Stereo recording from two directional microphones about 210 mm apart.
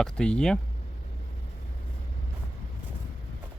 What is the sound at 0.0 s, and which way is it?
Speech, 5° left (ahead or behind).